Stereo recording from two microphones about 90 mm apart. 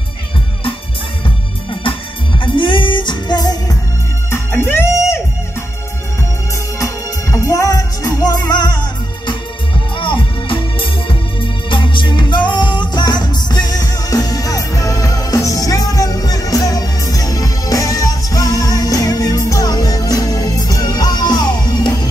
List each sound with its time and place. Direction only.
1.2 s music: 75° left (ahead or behind); by 3.5 s 50° left (ahead or behind)
4.3 s music: 25° left (ahead or behind)
6.8 s music: 35° left (ahead or behind)
9.9 s organ: 65° left (ahead or behind); by 21.9 s 50° left (ahead or behind)